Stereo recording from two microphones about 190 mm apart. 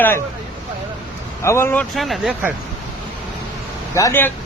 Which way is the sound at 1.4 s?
15° left (ahead or behind).